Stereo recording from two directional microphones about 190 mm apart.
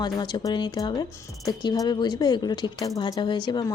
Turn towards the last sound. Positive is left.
turn(degrees=25)  # may be behind; listen again after turning